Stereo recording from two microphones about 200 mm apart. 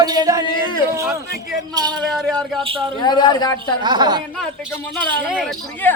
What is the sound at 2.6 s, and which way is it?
Speech, 25° right (ahead or behind).